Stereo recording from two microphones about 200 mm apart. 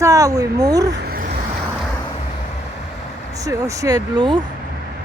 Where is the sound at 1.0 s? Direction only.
45° right (ahead or behind).